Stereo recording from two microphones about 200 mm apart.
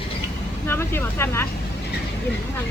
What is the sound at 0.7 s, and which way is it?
Speech, 10° left (ahead or behind).